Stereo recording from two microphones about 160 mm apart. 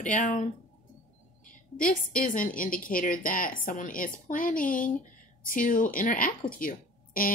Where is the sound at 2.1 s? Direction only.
60° left (ahead or behind).